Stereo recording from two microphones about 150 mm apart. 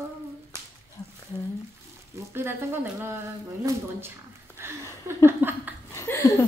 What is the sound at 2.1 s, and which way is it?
Speech, 15° right (ahead or behind).